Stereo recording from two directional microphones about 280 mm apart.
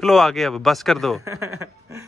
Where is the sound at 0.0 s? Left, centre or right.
Centre.